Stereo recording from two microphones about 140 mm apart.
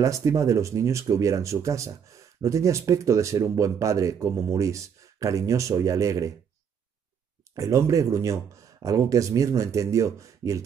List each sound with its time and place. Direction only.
0.0 s speech: 25° right (ahead or behind)
7.5 s speech: 25° right (ahead or behind)